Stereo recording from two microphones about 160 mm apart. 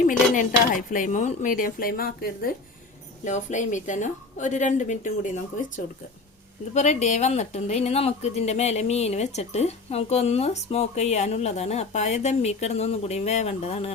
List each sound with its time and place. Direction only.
0.0 s speech: 55° left (ahead or behind)
3.2 s speech: 50° left (ahead or behind)
6.7 s speech: 45° left (ahead or behind)